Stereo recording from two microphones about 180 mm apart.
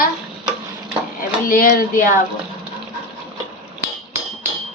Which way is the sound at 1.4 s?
50° left (ahead or behind).